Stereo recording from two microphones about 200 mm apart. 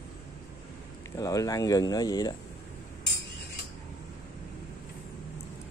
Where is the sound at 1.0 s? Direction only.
15° left (ahead or behind).